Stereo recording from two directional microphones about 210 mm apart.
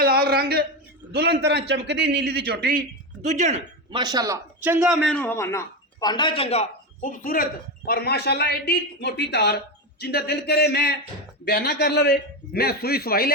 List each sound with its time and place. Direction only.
0.0 s a sound: 45° right (ahead or behind)
1.1 s a man's voice: 50° right (ahead or behind)
3.2 s speech: 35° right (ahead or behind)
3.9 s a man's voice: 20° right (ahead or behind)
5.0 s a man's voice: 5° left (ahead or behind); by 6.7 s 30° left (ahead or behind)
7.0 s a man's voice: 40° left (ahead or behind)